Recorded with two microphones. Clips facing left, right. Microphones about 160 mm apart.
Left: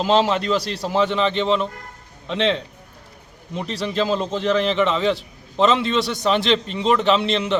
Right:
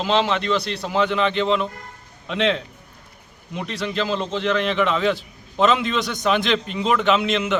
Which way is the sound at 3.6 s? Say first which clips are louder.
Left 3 dB; 35° left (ahead or behind).